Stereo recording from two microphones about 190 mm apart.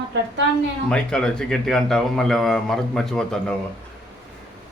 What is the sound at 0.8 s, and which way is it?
A man's voice, 5° left (ahead or behind).